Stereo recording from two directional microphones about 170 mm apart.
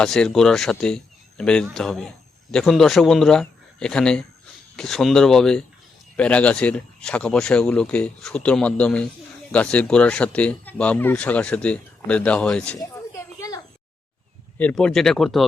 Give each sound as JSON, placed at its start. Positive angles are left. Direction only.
{"t": 0.0, "sound": "speech", "side_deg": 5}
{"t": 13.1, "sound": "a sound", "side_deg": 20}
{"t": 14.6, "sound": "speech", "side_deg": 5}